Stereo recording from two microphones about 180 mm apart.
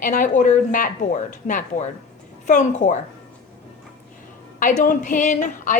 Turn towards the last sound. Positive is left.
turn(degrees=45)  # may be behind; listen again after turning